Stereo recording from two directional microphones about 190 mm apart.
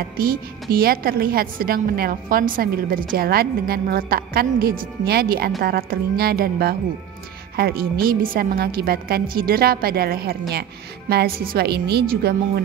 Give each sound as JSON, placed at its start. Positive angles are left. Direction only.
{"t": 0.0, "sound": "a woman's voice", "side_deg": -50}